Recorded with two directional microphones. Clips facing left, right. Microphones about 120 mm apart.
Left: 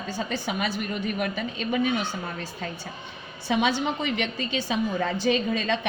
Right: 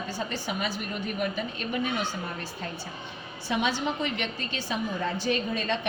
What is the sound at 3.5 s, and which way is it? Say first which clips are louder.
A woman's voice: left 4 dB; 90° left.